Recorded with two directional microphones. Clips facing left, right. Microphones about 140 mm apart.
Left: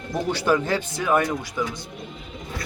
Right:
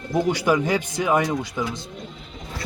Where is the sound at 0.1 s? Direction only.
15° right (ahead or behind).